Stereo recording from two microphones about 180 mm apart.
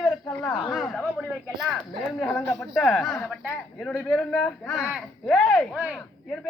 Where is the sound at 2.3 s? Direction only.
10° left (ahead or behind).